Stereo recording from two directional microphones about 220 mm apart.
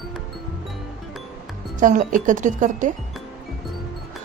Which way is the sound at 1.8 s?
35° right (ahead or behind).